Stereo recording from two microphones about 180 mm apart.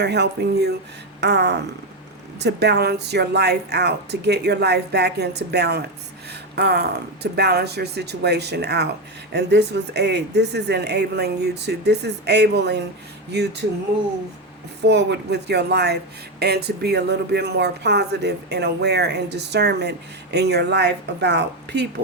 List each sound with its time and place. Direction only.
0.0 s speech: 70° right (ahead or behind)
14.8 s speech: 70° right (ahead or behind)